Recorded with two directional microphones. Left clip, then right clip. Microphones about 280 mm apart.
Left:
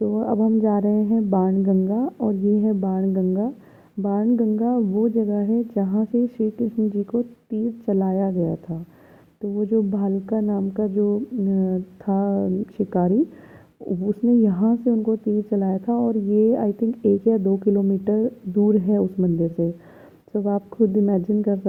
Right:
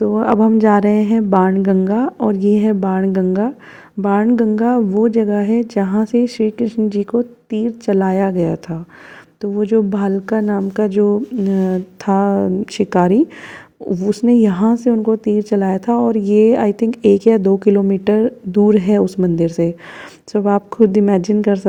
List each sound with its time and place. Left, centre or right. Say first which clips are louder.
0.0 s a woman's voice: right 8 dB; right